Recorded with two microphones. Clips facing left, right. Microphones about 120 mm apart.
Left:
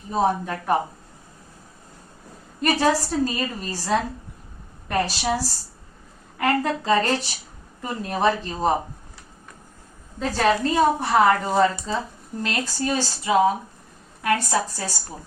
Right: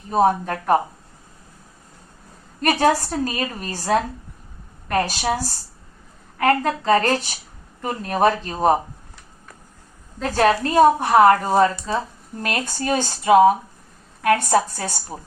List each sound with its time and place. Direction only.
0.1 s a woman's voice: 50° right (ahead or behind)
2.6 s a woman's voice: 55° right (ahead or behind)
10.3 s a woman's voice: 55° right (ahead or behind)